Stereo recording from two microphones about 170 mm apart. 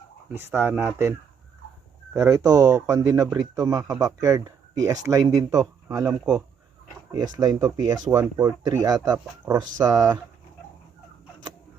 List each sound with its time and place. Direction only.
0.3 s speech: 15° right (ahead or behind)
2.1 s speech: 20° right (ahead or behind)